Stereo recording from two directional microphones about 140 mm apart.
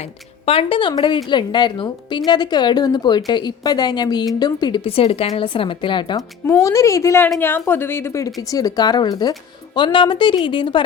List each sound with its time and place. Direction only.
0.4 s a woman's voice: 40° left (ahead or behind)
6.5 s a woman's voice: 20° left (ahead or behind)